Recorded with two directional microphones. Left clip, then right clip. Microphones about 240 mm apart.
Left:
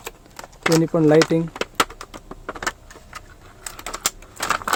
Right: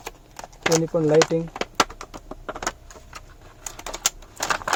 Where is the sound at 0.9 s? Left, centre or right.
Left.